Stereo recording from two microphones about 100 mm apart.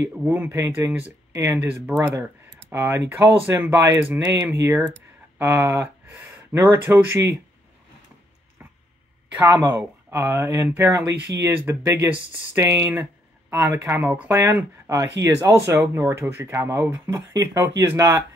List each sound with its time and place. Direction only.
0.1 s speech: 15° right (ahead or behind)
9.5 s speech: 25° right (ahead or behind)
14.3 s speech: 30° right (ahead or behind)
17.3 s speech: 35° right (ahead or behind)